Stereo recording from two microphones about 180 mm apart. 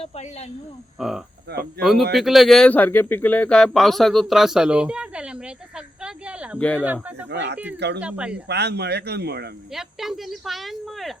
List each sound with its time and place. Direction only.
0.0 s speech: 35° left (ahead or behind)
0.9 s speech: centre (ahead or behind)
1.5 s speech: 60° right (ahead or behind)
1.8 s speech: centre (ahead or behind)
7.3 s speech: 70° right (ahead or behind)
8.0 s speech: 5° right (ahead or behind)
8.4 s speech: 65° right (ahead or behind)
9.7 s speech: centre (ahead or behind)